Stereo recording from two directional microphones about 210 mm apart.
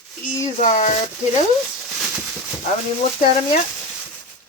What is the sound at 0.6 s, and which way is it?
Speech, 35° left (ahead or behind).